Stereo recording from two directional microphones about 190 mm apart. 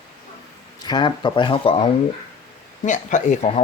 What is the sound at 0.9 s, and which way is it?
Speech, 25° left (ahead or behind).